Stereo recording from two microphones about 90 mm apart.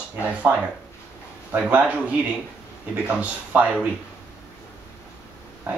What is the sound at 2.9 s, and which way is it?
Speech, 15° right (ahead or behind).